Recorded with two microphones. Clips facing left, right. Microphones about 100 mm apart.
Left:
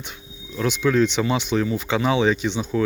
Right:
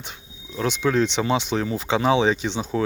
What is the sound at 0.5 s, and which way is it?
Speech, 30° right (ahead or behind).